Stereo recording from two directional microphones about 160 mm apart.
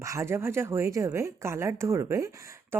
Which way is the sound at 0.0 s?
20° right (ahead or behind).